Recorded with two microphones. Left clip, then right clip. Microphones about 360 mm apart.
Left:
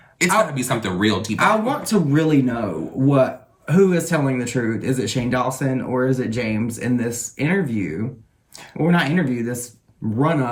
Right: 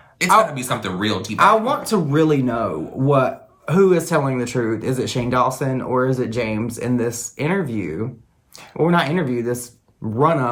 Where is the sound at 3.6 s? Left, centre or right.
Centre.